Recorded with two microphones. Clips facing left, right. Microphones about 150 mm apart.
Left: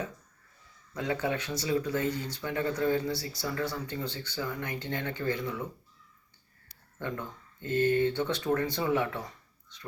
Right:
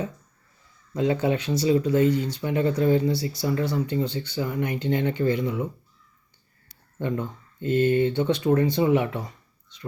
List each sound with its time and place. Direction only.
0.9 s speech: 25° right (ahead or behind)
7.0 s speech: 20° right (ahead or behind)